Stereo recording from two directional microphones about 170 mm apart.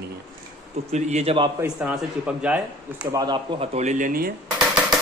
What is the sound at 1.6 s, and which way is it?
Speech, 5° right (ahead or behind).